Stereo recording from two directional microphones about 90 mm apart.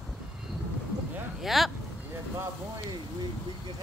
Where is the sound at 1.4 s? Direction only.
Centre (ahead or behind).